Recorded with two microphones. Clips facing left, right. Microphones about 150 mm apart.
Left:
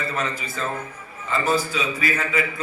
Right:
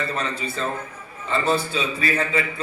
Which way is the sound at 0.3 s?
30° right (ahead or behind).